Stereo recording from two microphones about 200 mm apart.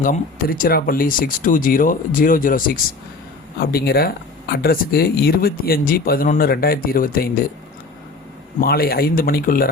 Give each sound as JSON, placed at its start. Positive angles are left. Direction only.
{"t": 0.0, "sound": "speech", "side_deg": 45}
{"t": 8.6, "sound": "speech", "side_deg": 50}